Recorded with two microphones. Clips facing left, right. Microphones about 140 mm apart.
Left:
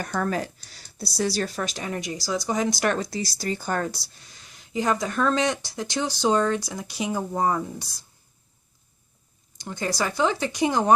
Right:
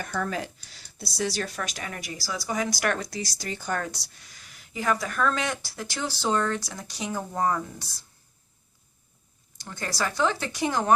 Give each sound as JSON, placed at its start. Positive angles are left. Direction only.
{"t": 0.0, "sound": "speech", "side_deg": 45}
{"t": 4.7, "sound": "speech", "side_deg": 20}
{"t": 9.6, "sound": "speech", "side_deg": 15}